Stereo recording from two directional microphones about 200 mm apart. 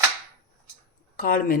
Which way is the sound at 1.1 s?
45° left (ahead or behind).